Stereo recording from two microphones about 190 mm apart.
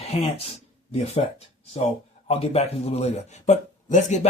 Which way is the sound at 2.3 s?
35° left (ahead or behind).